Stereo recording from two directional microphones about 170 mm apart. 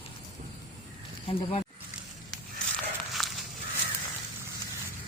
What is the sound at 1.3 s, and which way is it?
Speech, 30° left (ahead or behind).